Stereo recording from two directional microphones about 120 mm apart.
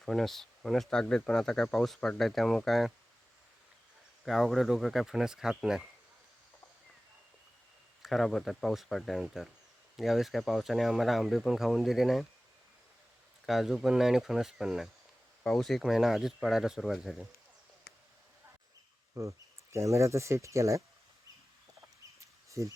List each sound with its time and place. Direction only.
0.0 s speech: 5° left (ahead or behind)
4.3 s speech: centre (ahead or behind)
8.0 s speech: centre (ahead or behind)
13.4 s speech: centre (ahead or behind)
19.7 s speech: 25° right (ahead or behind)
22.4 s a sound: 25° right (ahead or behind)